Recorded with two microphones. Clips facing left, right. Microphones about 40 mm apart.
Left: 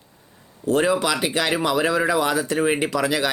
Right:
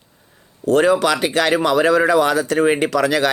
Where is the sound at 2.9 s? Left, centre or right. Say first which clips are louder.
Right 5 dB; centre.